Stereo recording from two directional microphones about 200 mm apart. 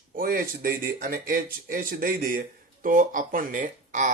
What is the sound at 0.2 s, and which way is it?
Speech, 45° right (ahead or behind).